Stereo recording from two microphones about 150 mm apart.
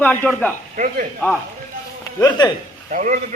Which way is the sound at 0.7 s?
60° right (ahead or behind).